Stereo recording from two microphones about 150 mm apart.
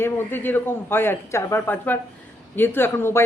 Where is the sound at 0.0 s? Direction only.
15° left (ahead or behind).